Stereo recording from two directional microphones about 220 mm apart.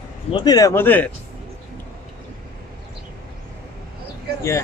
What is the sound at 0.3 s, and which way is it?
Speech, 20° left (ahead or behind).